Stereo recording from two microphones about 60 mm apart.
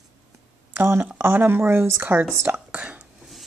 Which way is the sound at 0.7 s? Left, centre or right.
Right.